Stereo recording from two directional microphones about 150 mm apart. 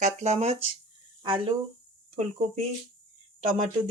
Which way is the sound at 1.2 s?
35° right (ahead or behind).